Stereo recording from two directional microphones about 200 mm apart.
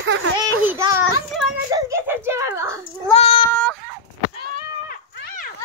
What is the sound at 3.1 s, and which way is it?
Speech, 30° left (ahead or behind).